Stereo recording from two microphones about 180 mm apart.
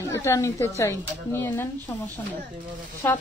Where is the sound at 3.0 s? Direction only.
10° left (ahead or behind).